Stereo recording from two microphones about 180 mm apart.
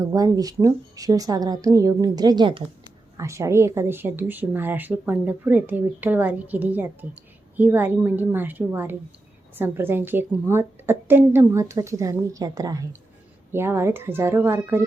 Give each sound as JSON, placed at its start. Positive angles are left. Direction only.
{"t": 0.0, "sound": "a woman's voice", "side_deg": -20}